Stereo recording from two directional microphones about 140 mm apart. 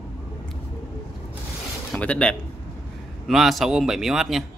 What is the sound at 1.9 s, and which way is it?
Speech, 10° left (ahead or behind).